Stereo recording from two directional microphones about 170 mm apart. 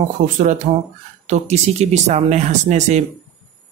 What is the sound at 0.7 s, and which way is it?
Speech, 35° right (ahead or behind).